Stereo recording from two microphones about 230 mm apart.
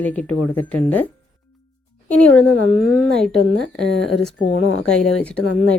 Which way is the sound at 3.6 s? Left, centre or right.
Right.